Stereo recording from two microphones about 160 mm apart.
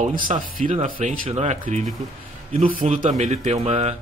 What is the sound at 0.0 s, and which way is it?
Speech, 55° right (ahead or behind).